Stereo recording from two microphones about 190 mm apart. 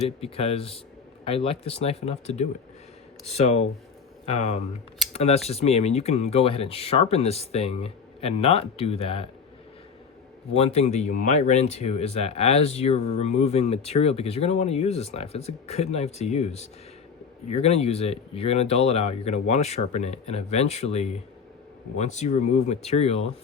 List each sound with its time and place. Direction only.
0.2 s speech: 30° left (ahead or behind)
10.5 s speech: 35° left (ahead or behind)